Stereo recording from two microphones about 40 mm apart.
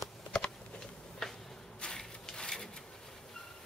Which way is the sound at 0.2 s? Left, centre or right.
Centre.